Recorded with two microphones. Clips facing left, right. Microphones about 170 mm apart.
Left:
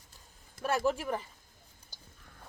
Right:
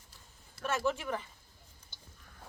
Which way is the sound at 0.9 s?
35° left (ahead or behind).